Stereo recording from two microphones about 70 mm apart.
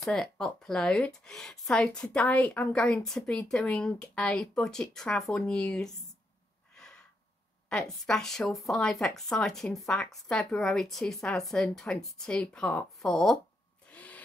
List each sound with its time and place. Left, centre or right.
0.0 s speech: centre
3.0 s a woman's voice: centre
6.7 s gasp: centre
7.7 s speech: centre
13.8 s a sound: centre